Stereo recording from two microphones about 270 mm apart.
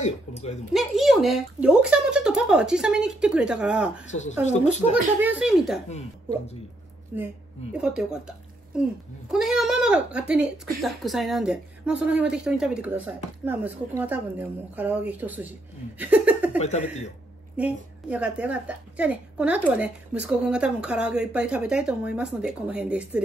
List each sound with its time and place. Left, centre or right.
0.0 s speech: left
0.7 s a woman's voice: centre
4.2 s speech: left
5.2 s a woman's voice: centre
7.1 s a woman's voice: centre
16.5 s speech: left
17.6 s a woman's voice: centre